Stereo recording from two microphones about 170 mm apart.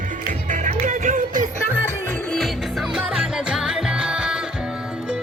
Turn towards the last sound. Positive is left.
turn(degrees=-5)  # may be behind; listen again after turning